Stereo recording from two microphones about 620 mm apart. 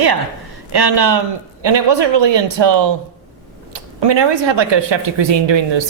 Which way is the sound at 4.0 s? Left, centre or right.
Right.